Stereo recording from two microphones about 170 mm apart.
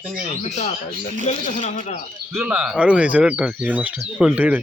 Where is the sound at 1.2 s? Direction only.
45° left (ahead or behind).